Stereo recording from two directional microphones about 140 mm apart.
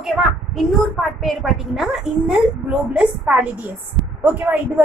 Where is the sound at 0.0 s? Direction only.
Centre (ahead or behind).